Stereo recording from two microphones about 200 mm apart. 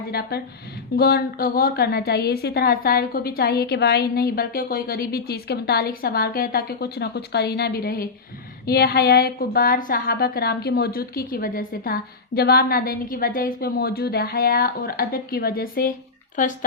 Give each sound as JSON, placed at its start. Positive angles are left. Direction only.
{"t": 0.1, "sound": "a woman's voice", "side_deg": 50}